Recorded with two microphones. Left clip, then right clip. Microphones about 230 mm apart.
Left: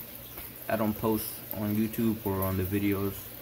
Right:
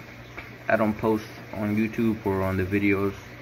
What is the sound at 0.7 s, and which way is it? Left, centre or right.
Speech, centre.